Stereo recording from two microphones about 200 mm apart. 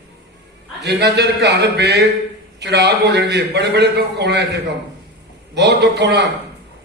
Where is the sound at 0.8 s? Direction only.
55° right (ahead or behind).